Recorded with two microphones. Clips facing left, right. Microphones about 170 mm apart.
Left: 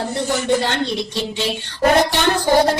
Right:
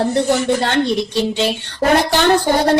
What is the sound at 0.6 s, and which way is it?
Speech, 65° right (ahead or behind).